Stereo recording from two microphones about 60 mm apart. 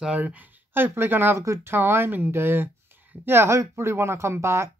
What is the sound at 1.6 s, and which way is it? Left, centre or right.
Speech, right.